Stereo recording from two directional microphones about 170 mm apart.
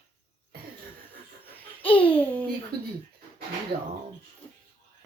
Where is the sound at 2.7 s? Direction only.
65° right (ahead or behind).